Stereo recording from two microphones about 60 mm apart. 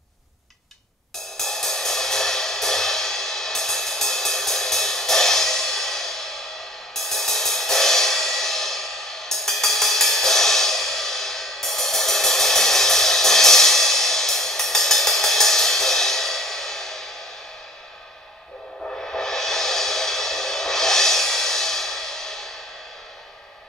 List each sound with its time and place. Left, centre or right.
1.1 s music: centre
18.9 s music: centre